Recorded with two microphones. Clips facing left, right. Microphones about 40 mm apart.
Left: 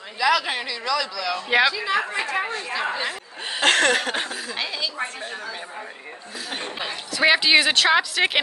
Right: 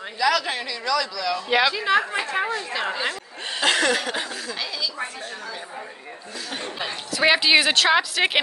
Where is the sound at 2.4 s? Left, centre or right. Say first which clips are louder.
Even; left.